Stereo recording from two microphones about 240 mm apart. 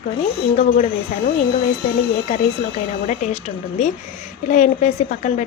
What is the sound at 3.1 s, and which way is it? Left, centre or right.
A woman's voice, left.